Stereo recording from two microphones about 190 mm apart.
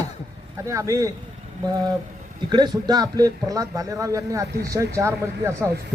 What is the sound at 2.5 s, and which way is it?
Speech, 20° right (ahead or behind).